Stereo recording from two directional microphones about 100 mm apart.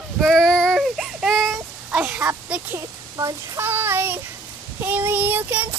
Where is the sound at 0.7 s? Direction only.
5° right (ahead or behind).